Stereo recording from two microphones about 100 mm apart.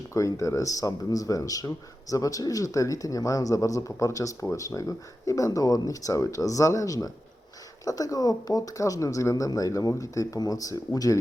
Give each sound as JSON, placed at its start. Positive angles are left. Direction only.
{"t": 0.1, "sound": "speech", "side_deg": 30}